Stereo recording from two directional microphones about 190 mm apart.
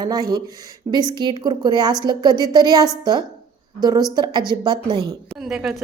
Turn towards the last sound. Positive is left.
turn(degrees=0)  # may be behind; listen again after turning